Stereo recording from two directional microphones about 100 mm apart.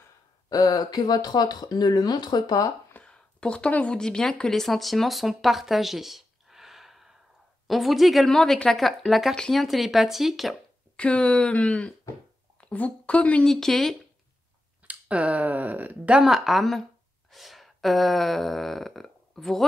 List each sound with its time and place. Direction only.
0.5 s speech: 40° left (ahead or behind)
2.9 s speech: 10° left (ahead or behind)
11.0 s speech: 10° left (ahead or behind)
14.9 s speech: 15° right (ahead or behind)
16.2 s speech: 5° right (ahead or behind)
17.3 s a sound: centre (ahead or behind)